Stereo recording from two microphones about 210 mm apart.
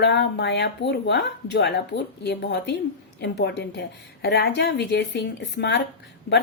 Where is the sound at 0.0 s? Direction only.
55° left (ahead or behind).